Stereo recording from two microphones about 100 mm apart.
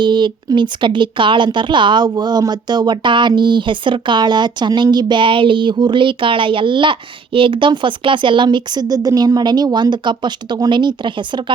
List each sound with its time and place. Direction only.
0.0 s speech: 50° right (ahead or behind)